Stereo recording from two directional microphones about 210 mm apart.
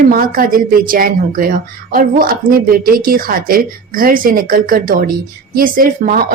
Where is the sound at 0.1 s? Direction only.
45° right (ahead or behind).